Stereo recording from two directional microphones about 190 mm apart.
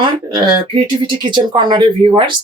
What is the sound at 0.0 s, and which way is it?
Speech, 25° right (ahead or behind).